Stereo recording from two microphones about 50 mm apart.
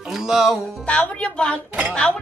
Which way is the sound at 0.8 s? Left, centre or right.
Left.